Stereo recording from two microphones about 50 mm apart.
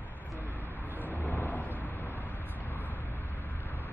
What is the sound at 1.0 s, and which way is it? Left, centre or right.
Vehicle, left.